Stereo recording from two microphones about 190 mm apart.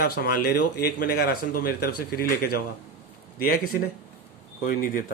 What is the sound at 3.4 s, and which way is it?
Speech, 50° left (ahead or behind).